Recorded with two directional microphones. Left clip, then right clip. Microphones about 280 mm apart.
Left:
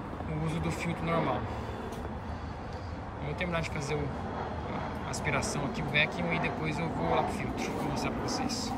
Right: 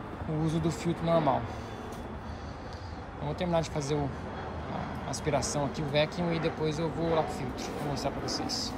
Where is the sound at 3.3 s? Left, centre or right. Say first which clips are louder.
Right 4 dB; centre.